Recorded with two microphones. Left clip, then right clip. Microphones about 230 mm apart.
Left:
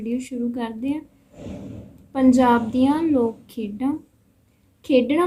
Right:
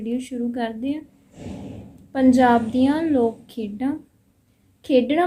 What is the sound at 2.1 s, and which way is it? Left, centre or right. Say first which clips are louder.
A woman's voice: right 1 dB; centre.